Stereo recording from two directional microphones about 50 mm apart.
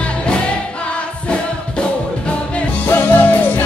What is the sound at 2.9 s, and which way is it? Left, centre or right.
Music, left.